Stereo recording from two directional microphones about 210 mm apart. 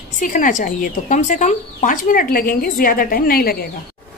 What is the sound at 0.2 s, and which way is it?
Speech, 40° left (ahead or behind).